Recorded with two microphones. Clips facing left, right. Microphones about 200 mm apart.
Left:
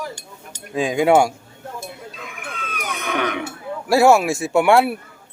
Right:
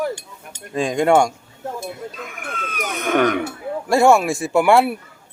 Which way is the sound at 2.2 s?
45° right (ahead or behind).